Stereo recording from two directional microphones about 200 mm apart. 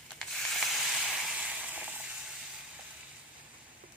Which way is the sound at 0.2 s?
Centre (ahead or behind).